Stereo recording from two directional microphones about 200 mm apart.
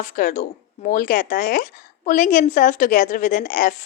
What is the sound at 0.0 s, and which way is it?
Speech, 45° left (ahead or behind).